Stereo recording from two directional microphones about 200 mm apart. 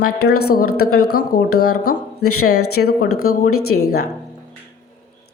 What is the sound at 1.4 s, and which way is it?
A woman's voice, 90° left.